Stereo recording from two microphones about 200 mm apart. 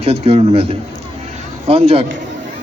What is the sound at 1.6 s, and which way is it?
Speech, 30° right (ahead or behind).